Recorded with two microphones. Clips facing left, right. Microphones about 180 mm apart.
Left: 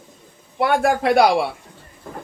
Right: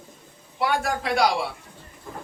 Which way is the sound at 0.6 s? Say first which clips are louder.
Left 7 dB; 55° left (ahead or behind).